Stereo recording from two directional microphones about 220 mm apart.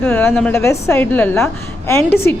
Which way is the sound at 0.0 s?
5° left (ahead or behind).